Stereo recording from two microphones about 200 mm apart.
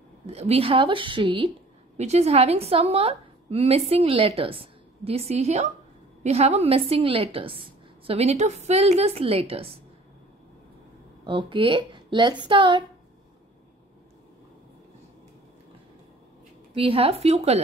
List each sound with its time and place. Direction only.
0.3 s a woman's voice: 30° right (ahead or behind)
11.2 s a woman's voice: 25° right (ahead or behind)
16.7 s a woman's voice: 30° right (ahead or behind)